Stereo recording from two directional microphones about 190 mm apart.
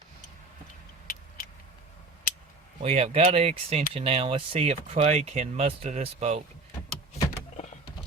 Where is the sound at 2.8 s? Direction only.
35° right (ahead or behind).